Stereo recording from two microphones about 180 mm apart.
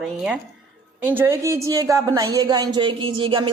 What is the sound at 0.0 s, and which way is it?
Speech, 5° right (ahead or behind).